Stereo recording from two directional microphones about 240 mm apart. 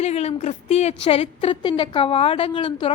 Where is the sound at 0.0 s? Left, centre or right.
Left.